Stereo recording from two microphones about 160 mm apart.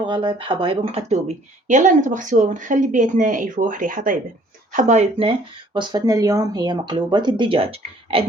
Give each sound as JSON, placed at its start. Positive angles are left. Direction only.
{"t": 0.0, "sound": "speech", "side_deg": -30}
{"t": 1.6, "sound": "speech", "side_deg": -50}
{"t": 5.1, "sound": "speech", "side_deg": -35}